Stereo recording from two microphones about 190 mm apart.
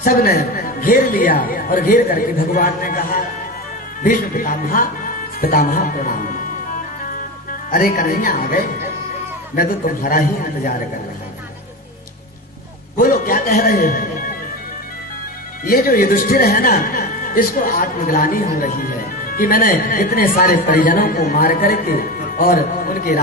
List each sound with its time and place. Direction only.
0.0 s a man's voice: 50° left (ahead or behind)
7.0 s music: 45° left (ahead or behind)
7.7 s a man's voice: 45° left (ahead or behind)
13.0 s a man's voice: 45° left (ahead or behind)
15.6 s a man's voice: 50° left (ahead or behind)